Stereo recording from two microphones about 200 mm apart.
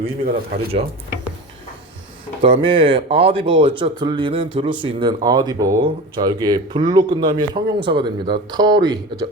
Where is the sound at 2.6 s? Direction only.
25° right (ahead or behind).